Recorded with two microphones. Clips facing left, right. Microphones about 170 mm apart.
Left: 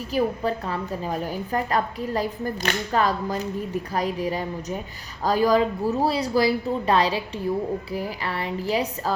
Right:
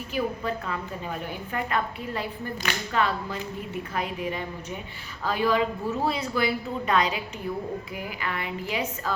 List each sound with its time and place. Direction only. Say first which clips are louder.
0.1 s a woman's voice: left 5 dB; 35° left (ahead or behind)